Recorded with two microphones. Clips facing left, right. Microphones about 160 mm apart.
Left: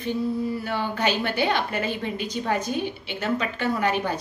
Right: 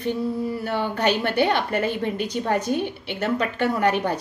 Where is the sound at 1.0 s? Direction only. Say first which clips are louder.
Right 4 dB; 55° right (ahead or behind).